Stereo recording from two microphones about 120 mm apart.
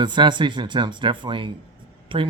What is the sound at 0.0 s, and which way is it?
Speech, 40° right (ahead or behind).